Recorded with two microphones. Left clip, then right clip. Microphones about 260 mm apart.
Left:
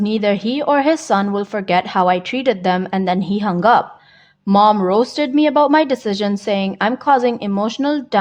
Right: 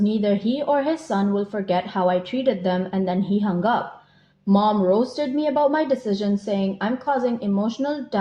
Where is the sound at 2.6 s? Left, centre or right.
Left.